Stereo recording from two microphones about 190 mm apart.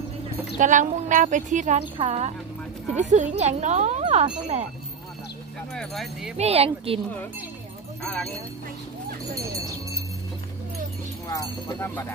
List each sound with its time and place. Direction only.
0.6 s speech: 40° right (ahead or behind)
5.8 s speech: centre (ahead or behind)
6.3 s speech: 30° right (ahead or behind)
9.2 s speech: 20° right (ahead or behind)
11.2 s speech: 15° left (ahead or behind)